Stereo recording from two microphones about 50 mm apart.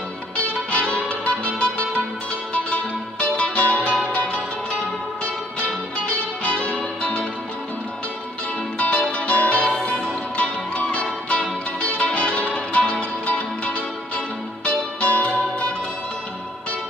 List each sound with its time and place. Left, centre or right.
0.4 s music: left
5.2 s music: left
8.7 s music: left